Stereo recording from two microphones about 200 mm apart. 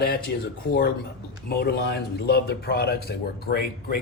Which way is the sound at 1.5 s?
55° left (ahead or behind).